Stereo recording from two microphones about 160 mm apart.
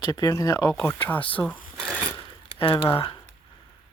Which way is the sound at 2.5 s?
35° left (ahead or behind).